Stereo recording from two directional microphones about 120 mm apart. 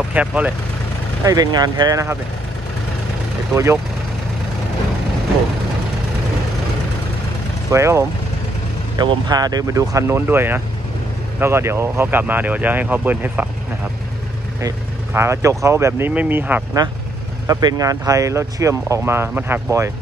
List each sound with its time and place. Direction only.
0.1 s speech: 10° right (ahead or behind)
1.2 s speech: 30° right (ahead or behind)
3.5 s speech: 20° right (ahead or behind)
7.7 s speech: 25° right (ahead or behind)
8.9 s speech: 35° right (ahead or behind); by 13.5 s 15° right (ahead or behind)
15.1 s speech: 20° right (ahead or behind)
17.5 s speech: 30° right (ahead or behind)